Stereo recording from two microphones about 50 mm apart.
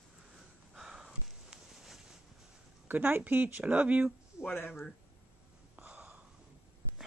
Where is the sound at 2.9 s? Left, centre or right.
Right.